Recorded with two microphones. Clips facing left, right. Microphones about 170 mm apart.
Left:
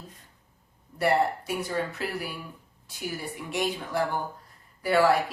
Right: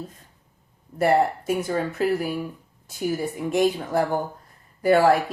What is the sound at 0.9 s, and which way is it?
Speech, 50° right (ahead or behind).